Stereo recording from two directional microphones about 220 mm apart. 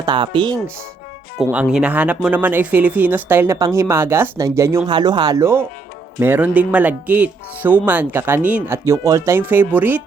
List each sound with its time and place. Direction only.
0.0 s speech: 20° right (ahead or behind)
1.4 s speech: 5° right (ahead or behind)